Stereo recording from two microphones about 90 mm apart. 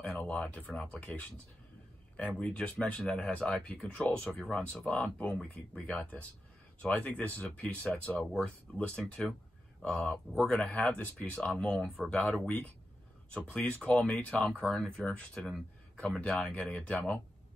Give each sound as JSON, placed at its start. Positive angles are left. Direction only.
{"t": 0.2, "sound": "speech", "side_deg": 20}
{"t": 2.1, "sound": "speech", "side_deg": 10}